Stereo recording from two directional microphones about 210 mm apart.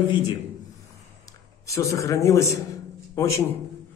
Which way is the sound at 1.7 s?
15° left (ahead or behind).